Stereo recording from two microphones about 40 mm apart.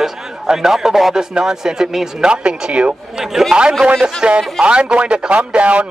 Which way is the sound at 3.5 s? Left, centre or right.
Centre.